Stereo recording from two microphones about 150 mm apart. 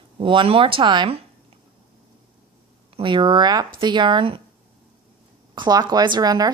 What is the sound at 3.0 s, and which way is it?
Speech, 35° right (ahead or behind).